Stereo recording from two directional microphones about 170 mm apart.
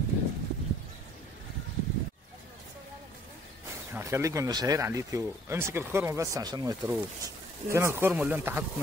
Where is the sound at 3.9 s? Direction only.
15° right (ahead or behind).